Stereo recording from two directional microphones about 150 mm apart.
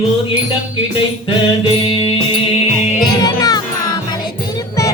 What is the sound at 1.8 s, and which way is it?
Music, 35° left (ahead or behind).